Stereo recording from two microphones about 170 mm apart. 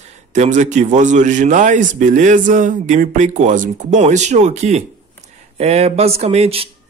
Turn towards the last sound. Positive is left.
turn(degrees=-35)  # may be behind; listen again after turning